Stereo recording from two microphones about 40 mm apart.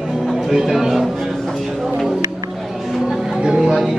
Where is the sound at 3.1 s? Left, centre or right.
Centre.